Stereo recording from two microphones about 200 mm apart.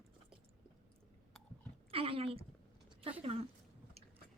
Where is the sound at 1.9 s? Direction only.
30° right (ahead or behind).